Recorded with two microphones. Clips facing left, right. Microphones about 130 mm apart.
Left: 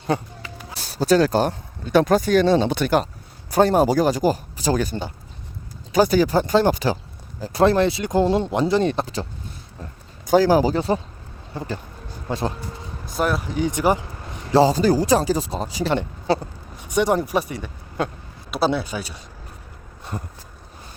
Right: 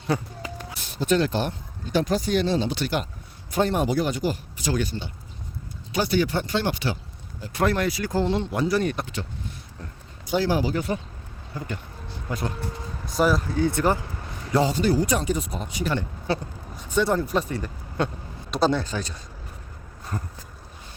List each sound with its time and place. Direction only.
0.7 s speech: 35° left (ahead or behind)
1.8 s speech: 60° left (ahead or behind)
3.5 s speech: 35° left (ahead or behind)
10.2 s speech: 40° left (ahead or behind)
13.1 s speech: centre (ahead or behind)
13.4 s speech: 15° left (ahead or behind)
14.5 s speech: 35° left (ahead or behind)
16.8 s speech: 15° left (ahead or behind)
20.1 s speech: 10° left (ahead or behind)